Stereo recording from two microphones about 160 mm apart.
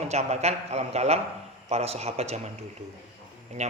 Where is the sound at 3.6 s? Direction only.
45° right (ahead or behind).